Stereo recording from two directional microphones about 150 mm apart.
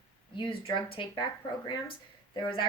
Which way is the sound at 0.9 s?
30° left (ahead or behind).